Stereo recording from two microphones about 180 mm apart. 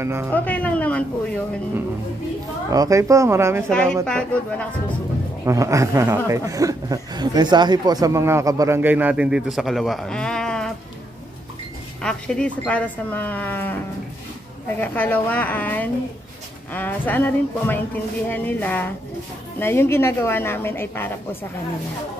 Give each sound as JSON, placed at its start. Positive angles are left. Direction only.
{"t": 0.0, "sound": "speech", "side_deg": -15}
{"t": 0.3, "sound": "speech", "side_deg": 10}
{"t": 2.7, "sound": "speech", "side_deg": -20}
{"t": 3.7, "sound": "a woman's voice", "side_deg": 5}
{"t": 5.4, "sound": "speech", "side_deg": -15}
{"t": 12.0, "sound": "speech", "side_deg": 5}
{"t": 14.8, "sound": "speech", "side_deg": 10}